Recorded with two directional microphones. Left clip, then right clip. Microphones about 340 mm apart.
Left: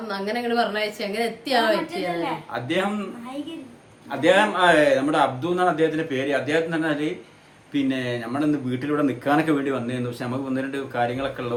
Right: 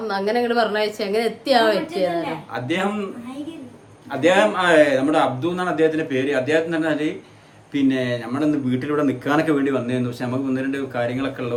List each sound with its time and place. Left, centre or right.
0.1 s a woman's voice: centre
2.5 s speech: centre
4.1 s speech: centre